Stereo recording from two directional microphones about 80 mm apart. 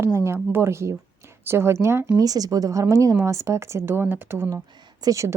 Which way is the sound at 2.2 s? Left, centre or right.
Right.